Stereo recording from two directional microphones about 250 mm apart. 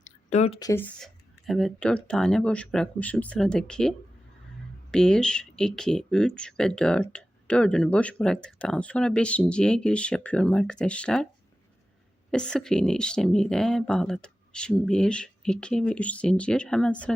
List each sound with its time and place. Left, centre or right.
0.3 s speech: left
0.7 s speech: centre
12.3 s speech: centre